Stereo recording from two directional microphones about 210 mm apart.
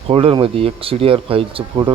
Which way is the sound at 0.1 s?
25° right (ahead or behind).